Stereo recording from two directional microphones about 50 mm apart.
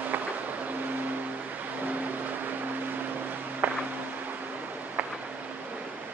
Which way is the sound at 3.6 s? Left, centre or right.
Right.